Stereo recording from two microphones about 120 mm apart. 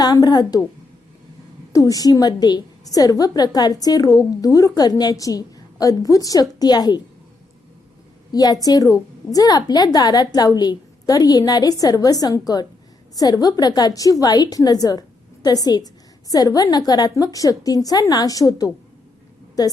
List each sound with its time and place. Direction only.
0.0 s a woman's voice: 30° left (ahead or behind)
1.7 s a woman's voice: 30° left (ahead or behind)
8.3 s a woman's voice: 30° left (ahead or behind)